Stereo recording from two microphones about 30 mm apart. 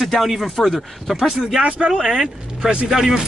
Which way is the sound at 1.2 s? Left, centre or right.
Centre.